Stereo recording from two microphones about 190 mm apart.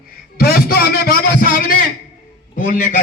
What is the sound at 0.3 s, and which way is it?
A man's voice, 55° left (ahead or behind).